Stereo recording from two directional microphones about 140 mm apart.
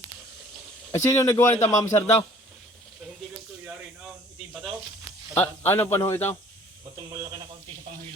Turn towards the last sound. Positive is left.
turn(degrees=-30)  # may be behind; listen again after turning